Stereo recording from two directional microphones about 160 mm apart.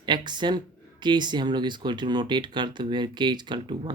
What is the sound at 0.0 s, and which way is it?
Speech, 30° right (ahead or behind).